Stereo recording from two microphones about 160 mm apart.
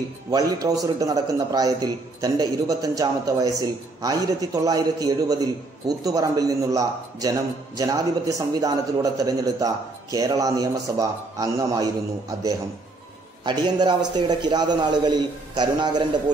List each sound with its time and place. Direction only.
0.3 s a man's voice: 25° right (ahead or behind)